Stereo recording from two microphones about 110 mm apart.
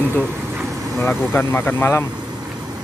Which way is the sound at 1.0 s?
20° left (ahead or behind).